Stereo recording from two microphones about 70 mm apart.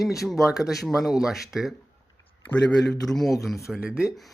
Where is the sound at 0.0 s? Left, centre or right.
Centre.